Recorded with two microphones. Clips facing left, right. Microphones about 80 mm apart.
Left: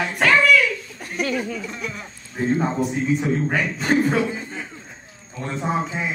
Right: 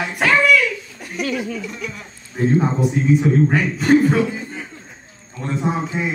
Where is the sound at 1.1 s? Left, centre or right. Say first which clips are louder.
Right 1 dB; left.